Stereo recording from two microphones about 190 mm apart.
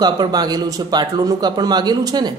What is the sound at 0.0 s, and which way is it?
Speech, 20° right (ahead or behind).